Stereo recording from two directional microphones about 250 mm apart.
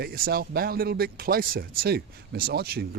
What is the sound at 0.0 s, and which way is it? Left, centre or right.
Speech, right.